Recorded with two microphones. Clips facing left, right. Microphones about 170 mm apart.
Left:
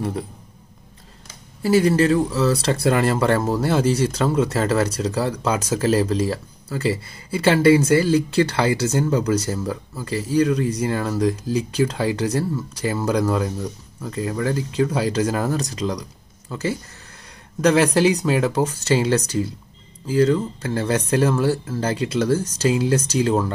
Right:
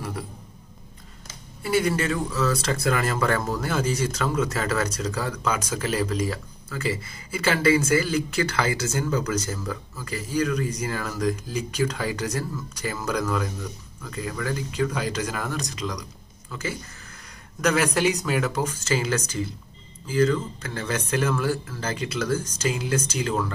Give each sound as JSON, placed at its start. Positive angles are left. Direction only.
{"t": 1.6, "sound": "speech", "side_deg": 35}